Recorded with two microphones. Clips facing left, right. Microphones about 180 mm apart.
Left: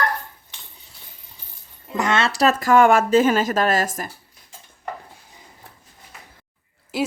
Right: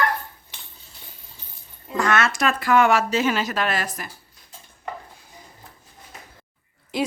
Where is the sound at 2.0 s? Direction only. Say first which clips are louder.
Left 2 dB; 25° left (ahead or behind); by 4.1 s 45° left (ahead or behind).